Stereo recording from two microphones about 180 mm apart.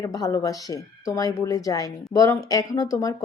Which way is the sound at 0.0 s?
20° left (ahead or behind).